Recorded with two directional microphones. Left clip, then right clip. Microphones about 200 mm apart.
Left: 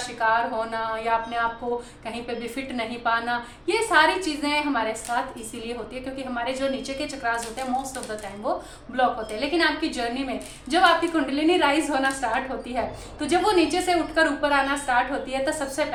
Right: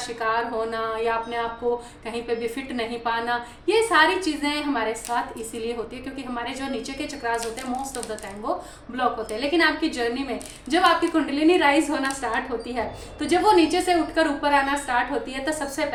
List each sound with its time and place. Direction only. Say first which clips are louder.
0.2 s a woman's voice: left 2 dB; 15° left (ahead or behind)
2.4 s a woman's voice: right 2 dB; 15° left (ahead or behind)
6.3 s a woman's voice: left 3 dB; 15° left (ahead or behind)
9.0 s a woman's voice: left 1 dB; 15° left (ahead or behind)